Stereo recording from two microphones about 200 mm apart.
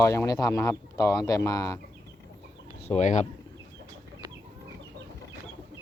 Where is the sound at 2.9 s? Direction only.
35° left (ahead or behind).